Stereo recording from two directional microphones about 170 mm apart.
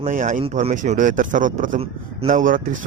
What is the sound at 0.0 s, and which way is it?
Speech, 45° right (ahead or behind).